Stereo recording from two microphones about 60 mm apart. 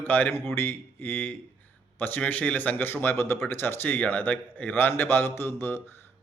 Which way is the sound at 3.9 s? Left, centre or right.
Left.